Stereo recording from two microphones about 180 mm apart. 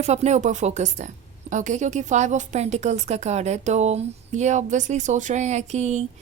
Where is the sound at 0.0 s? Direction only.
40° right (ahead or behind).